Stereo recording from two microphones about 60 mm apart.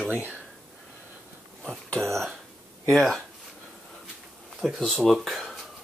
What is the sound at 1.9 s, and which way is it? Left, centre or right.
Speech, right.